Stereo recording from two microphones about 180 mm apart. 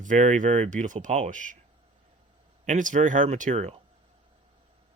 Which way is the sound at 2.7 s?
45° right (ahead or behind).